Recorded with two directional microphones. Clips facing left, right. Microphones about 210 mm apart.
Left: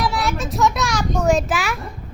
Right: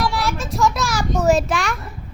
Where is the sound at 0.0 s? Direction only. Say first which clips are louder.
Even; centre (ahead or behind).